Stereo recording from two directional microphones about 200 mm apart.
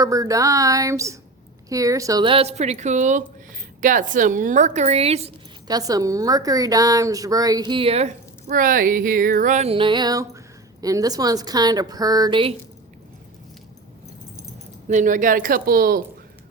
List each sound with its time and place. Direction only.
0.0 s speech: 15° right (ahead or behind)
5.6 s a woman's voice: 20° right (ahead or behind)
14.8 s speech: 40° right (ahead or behind)